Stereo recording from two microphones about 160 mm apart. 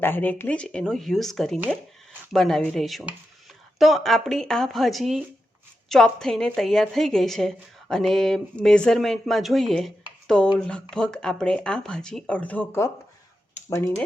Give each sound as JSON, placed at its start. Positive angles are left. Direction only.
{"t": 0.0, "sound": "a woman's voice", "side_deg": 10}